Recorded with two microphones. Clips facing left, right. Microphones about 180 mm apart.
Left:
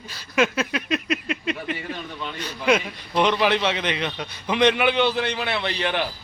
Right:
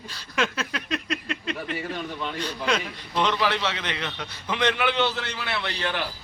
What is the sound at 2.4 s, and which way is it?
A man's voice, 15° left (ahead or behind).